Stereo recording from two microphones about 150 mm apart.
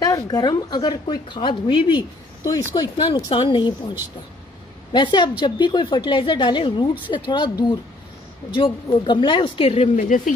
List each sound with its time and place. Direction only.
0.0 s a woman's voice: 25° left (ahead or behind)
4.9 s a woman's voice: 30° left (ahead or behind)
9.7 s speech: 50° left (ahead or behind)